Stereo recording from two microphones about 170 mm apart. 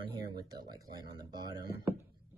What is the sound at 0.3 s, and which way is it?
Speech, 25° right (ahead or behind).